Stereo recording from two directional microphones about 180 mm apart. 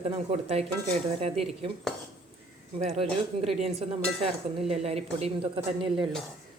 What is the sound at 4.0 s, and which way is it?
Speech, centre (ahead or behind).